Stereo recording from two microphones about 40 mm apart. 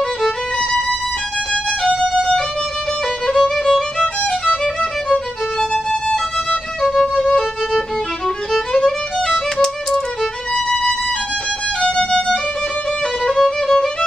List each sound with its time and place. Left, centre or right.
1.5 s violin: left
3.3 s music: centre
5.1 s violin: centre
13.2 s music: centre